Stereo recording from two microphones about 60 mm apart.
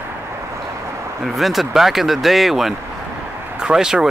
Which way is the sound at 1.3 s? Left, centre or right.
Centre.